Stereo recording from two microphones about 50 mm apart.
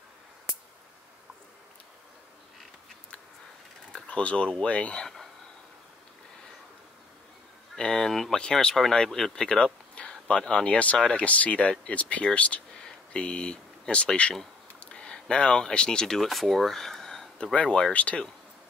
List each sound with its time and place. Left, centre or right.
4.1 s speech: left
5.0 s a sound: centre
7.7 s speech: centre
11.2 s speech: left
12.7 s a sound: centre
13.2 s speech: centre
16.2 s speech: centre
17.4 s speech: centre